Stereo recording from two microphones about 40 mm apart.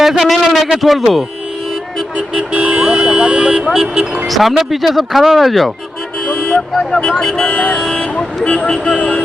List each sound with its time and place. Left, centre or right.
0.0 s a sound: centre
0.8 s speech: centre
2.5 s vehicle: right
3.7 s speech: centre
6.2 s vehicle: centre
7.1 s speech: centre
8.4 s music: left